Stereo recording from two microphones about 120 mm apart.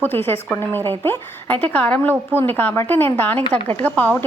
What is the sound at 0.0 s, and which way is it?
A woman's voice, 20° left (ahead or behind).